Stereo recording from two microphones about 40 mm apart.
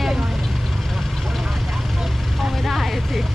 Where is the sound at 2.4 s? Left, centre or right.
Centre.